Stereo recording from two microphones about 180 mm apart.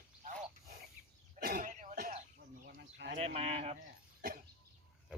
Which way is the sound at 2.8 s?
70° right (ahead or behind).